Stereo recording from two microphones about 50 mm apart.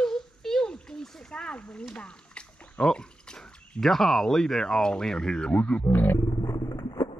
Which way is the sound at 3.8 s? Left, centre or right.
Centre.